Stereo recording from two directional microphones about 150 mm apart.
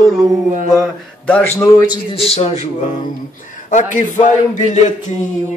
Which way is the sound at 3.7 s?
55° left (ahead or behind).